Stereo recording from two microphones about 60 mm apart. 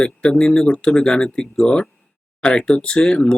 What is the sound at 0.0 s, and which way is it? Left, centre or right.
Speech, centre.